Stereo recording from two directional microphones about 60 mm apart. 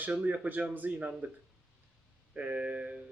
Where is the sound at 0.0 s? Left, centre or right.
Right.